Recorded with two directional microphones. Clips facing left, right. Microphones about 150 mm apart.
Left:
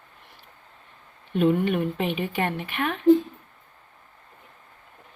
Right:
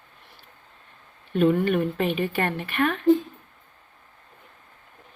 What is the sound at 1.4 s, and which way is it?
Speech, 15° left (ahead or behind).